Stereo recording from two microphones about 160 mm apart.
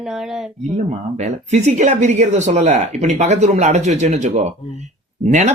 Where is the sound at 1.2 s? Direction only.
45° right (ahead or behind).